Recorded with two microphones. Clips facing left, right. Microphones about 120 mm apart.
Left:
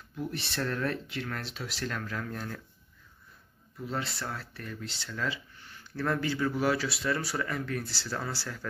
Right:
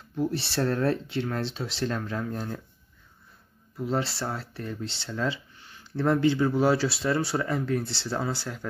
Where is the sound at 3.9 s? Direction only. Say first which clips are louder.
Right 6 dB; 30° right (ahead or behind).